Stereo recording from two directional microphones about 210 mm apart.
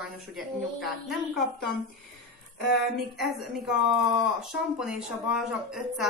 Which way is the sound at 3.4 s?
Centre (ahead or behind).